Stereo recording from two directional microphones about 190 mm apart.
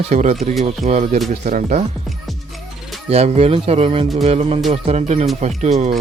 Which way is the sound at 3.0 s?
35° right (ahead or behind).